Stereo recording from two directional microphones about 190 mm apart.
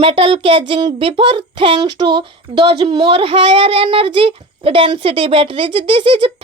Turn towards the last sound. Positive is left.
turn(degrees=-30)  # may be behind; listen again after turning